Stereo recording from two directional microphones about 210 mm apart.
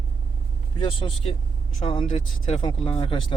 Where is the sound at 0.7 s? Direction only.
25° left (ahead or behind).